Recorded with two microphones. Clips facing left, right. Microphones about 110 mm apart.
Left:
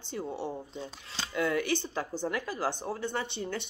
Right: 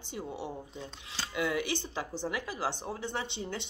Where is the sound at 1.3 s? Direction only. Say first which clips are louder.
Left 3 dB; 15° right (ahead or behind).